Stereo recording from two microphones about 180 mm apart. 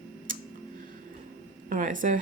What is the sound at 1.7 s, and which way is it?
Speech, 45° right (ahead or behind).